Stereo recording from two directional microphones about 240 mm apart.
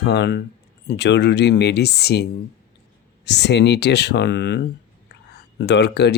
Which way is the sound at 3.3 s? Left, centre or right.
Left.